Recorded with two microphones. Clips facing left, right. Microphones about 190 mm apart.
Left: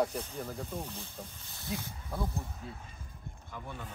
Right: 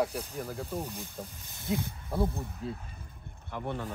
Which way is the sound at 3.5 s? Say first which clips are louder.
Right 9 dB; 65° right (ahead or behind).